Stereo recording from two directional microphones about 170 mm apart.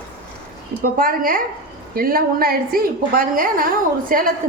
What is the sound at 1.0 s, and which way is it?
A woman's voice, 55° right (ahead or behind).